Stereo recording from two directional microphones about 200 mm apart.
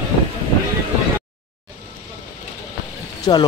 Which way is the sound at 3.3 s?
20° left (ahead or behind).